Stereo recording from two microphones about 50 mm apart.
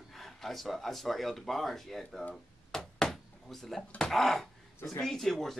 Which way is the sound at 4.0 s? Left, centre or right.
Centre.